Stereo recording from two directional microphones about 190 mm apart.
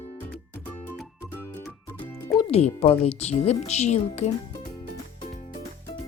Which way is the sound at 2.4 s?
35° left (ahead or behind).